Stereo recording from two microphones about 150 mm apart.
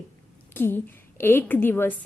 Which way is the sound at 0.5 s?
15° left (ahead or behind).